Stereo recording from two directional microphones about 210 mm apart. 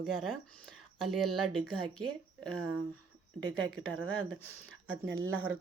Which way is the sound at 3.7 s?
Centre (ahead or behind).